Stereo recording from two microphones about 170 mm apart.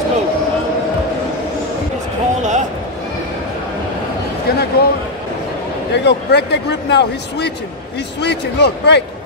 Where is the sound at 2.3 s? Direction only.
45° right (ahead or behind).